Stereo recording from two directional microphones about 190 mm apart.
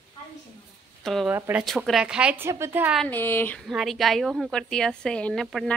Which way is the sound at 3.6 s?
Centre (ahead or behind).